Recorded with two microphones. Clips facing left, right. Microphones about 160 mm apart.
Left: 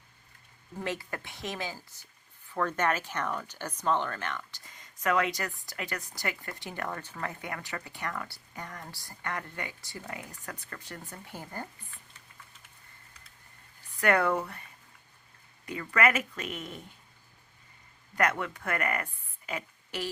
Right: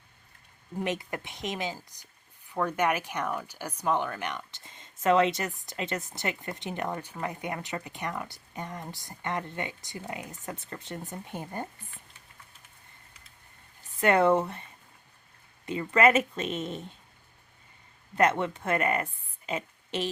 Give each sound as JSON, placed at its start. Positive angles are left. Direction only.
{"t": 0.8, "sound": "speech", "side_deg": -20}
{"t": 14.0, "sound": "speech", "side_deg": -25}
{"t": 18.1, "sound": "speech", "side_deg": -25}
{"t": 19.5, "sound": "a sound", "side_deg": -25}